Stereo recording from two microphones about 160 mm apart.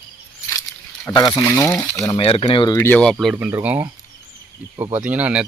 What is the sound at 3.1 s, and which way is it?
Speech, 5° right (ahead or behind).